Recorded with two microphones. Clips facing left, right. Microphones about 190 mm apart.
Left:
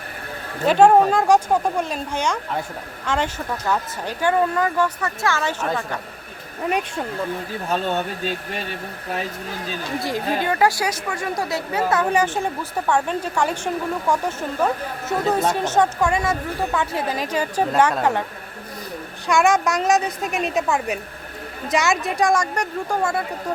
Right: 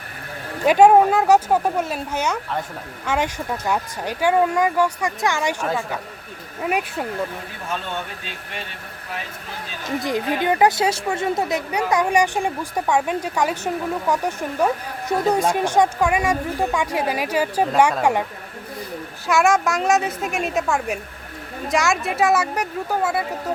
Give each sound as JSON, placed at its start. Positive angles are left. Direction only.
{"t": 0.6, "sound": "speech", "side_deg": -10}
{"t": 5.6, "sound": "a woman's voice", "side_deg": 0}
{"t": 7.7, "sound": "speech", "side_deg": 40}
{"t": 10.0, "sound": "speech", "side_deg": -20}
{"t": 19.3, "sound": "a woman's voice", "side_deg": 0}